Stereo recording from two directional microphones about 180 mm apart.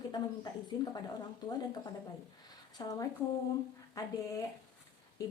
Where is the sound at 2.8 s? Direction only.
20° left (ahead or behind).